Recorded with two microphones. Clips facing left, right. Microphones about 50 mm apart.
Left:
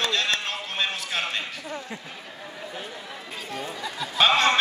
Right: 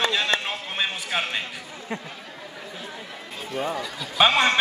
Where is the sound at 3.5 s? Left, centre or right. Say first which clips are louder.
Right 7 dB; right.